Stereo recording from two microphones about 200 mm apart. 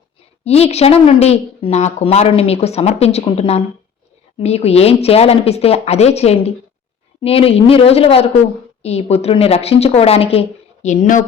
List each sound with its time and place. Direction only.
0.4 s a woman's voice: 30° left (ahead or behind)